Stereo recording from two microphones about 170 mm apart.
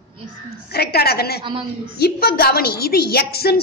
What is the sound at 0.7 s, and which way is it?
A woman's voice, 70° left (ahead or behind).